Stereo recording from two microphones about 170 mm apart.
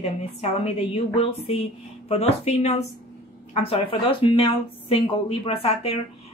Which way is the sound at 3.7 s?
30° left (ahead or behind).